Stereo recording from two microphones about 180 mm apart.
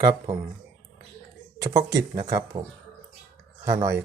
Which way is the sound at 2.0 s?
20° right (ahead or behind).